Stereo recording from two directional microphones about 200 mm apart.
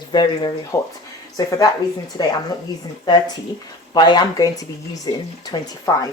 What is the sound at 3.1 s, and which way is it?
Speech, 20° left (ahead or behind).